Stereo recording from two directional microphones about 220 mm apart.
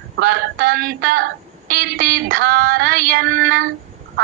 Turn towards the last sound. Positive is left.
turn(degrees=-45)  # may be behind; listen again after turning